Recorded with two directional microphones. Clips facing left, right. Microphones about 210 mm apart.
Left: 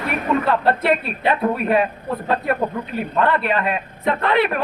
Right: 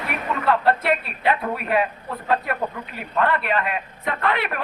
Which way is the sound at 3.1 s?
30° left (ahead or behind).